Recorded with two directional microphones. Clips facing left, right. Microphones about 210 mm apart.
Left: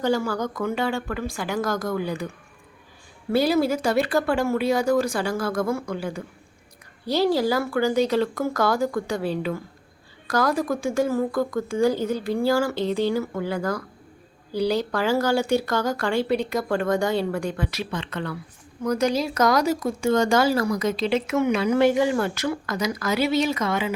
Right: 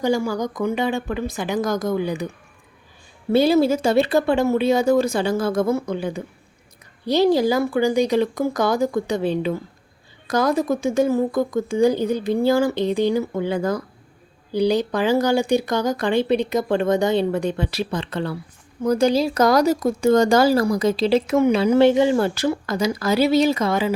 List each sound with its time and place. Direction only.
0.0 s speech: 15° right (ahead or behind)
3.3 s speech: 25° right (ahead or behind)